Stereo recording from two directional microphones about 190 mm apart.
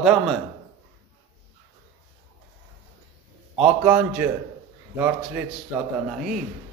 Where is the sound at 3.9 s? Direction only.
5° right (ahead or behind).